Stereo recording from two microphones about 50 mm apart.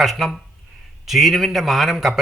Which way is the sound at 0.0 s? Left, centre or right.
Centre.